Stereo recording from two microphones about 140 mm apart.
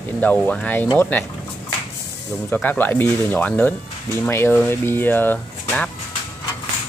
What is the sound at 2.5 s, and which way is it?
Speech, 15° left (ahead or behind).